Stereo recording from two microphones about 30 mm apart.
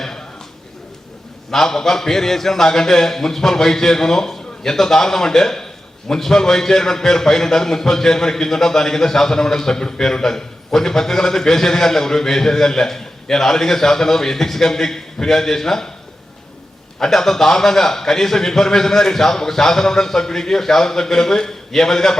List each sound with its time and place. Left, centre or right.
1.5 s a man's voice: centre
17.0 s a man's voice: centre